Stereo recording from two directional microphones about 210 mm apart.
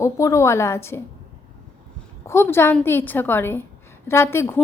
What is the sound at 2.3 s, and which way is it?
Speech, 10° left (ahead or behind).